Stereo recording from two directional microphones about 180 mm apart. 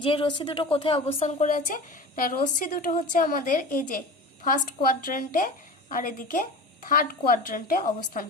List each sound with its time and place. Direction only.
0.0 s a woman's voice: 30° left (ahead or behind); by 8.3 s 50° left (ahead or behind)